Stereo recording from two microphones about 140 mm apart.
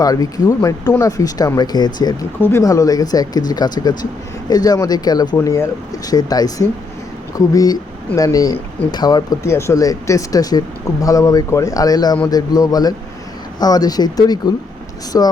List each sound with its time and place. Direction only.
0.0 s speech: 25° left (ahead or behind)
2.4 s speech: 20° left (ahead or behind)